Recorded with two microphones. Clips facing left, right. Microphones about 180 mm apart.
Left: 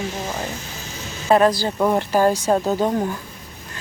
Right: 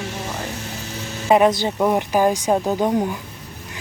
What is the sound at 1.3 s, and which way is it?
Speech, 20° right (ahead or behind).